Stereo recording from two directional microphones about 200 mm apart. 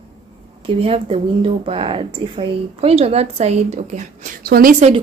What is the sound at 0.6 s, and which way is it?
A woman's voice, 30° right (ahead or behind).